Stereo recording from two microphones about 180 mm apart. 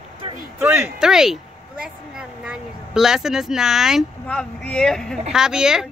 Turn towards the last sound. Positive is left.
turn(degrees=-5)  # may be behind; listen again after turning